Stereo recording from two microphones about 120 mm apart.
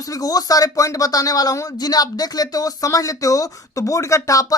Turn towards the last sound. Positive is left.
turn(degrees=30)  # may be behind; listen again after turning